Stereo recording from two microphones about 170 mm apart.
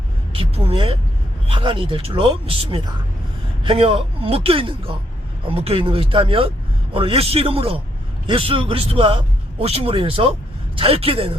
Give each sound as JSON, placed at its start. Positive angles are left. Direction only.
{"t": 0.3, "sound": "speech", "side_deg": -35}